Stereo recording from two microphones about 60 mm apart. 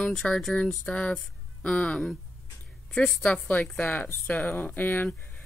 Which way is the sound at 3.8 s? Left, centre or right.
Left.